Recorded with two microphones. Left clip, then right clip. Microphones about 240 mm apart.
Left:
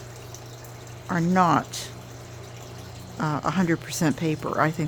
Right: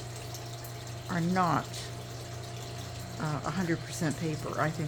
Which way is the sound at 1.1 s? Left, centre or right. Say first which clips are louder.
Left 8 dB; left.